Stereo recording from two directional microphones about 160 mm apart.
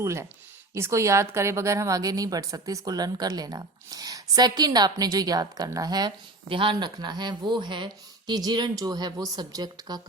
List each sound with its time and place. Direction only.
0.0 s a woman's voice: 15° right (ahead or behind)